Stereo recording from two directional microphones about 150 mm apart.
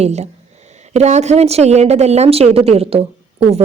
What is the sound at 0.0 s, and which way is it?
A woman's voice, 45° right (ahead or behind).